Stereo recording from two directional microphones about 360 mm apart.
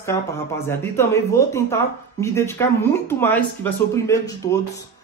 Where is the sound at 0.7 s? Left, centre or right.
Centre.